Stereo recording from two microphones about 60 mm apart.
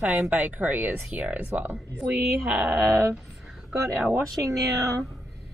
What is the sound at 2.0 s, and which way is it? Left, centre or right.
Speech, centre.